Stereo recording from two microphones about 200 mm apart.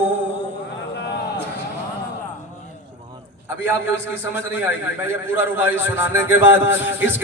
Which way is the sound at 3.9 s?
10° right (ahead or behind).